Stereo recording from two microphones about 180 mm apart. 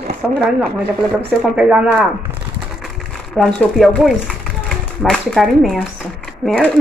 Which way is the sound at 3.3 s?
5° left (ahead or behind).